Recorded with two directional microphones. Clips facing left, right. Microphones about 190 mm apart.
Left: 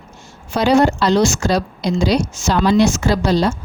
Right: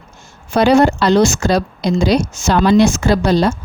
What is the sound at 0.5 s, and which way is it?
Speech, 60° right (ahead or behind).